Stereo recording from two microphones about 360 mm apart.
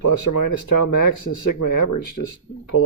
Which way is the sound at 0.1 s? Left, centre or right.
Left.